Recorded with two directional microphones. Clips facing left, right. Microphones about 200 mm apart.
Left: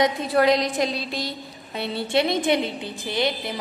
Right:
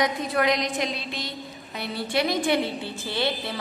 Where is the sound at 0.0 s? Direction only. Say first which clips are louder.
Left 4 dB; 30° left (ahead or behind).